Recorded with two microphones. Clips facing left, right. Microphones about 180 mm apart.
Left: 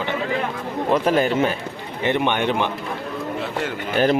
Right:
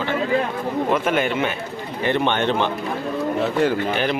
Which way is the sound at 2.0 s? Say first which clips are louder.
Even; 15° left (ahead or behind).